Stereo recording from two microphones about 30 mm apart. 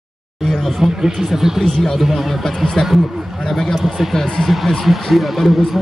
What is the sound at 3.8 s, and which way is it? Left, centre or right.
Speech, centre.